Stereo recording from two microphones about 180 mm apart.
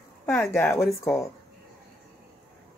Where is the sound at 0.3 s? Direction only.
15° left (ahead or behind).